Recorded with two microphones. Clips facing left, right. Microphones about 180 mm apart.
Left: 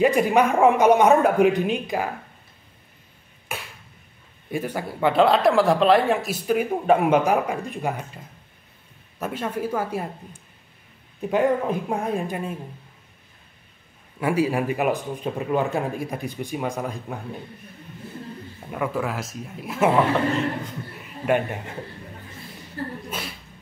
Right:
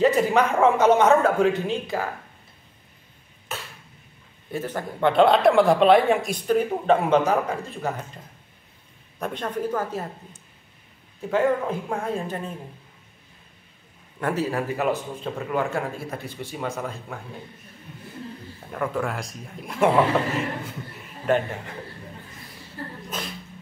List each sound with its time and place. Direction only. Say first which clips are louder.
0.0 s a man's voice: left 1 dB; 15° left (ahead or behind)
3.5 s a sound: left 1 dB; 10° left (ahead or behind)
4.5 s a man's voice: left 2 dB; 10° left (ahead or behind)
9.2 s a man's voice: even; 5° left (ahead or behind)
11.1 s a man's voice: left 1 dB; 15° left (ahead or behind)
14.2 s a man's voice: left 3 dB; 10° left (ahead or behind)
18.7 s speech: left 1 dB; 5° left (ahead or behind)
21.3 s a man's voice: even; 15° left (ahead or behind)
23.0 s speech: even; 10° left (ahead or behind)